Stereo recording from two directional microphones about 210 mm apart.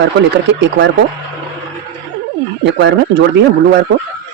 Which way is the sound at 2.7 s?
55° right (ahead or behind).